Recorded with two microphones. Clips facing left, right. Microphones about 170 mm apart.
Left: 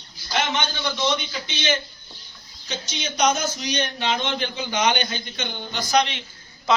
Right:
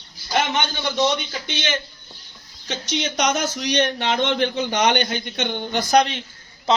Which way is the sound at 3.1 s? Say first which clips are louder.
Left 3 dB; 80° right.